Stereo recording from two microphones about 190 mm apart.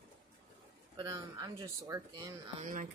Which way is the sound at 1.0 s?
20° right (ahead or behind).